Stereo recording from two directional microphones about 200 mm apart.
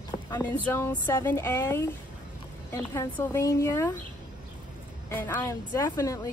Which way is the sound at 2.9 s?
15° left (ahead or behind).